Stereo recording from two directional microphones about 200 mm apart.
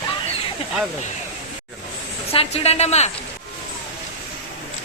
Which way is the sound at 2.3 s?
30° left (ahead or behind).